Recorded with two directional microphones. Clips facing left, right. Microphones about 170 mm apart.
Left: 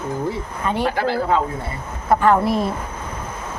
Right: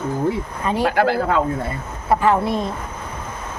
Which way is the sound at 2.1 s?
5° right (ahead or behind).